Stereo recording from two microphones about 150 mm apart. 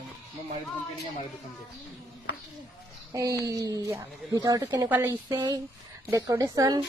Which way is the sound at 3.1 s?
20° right (ahead or behind).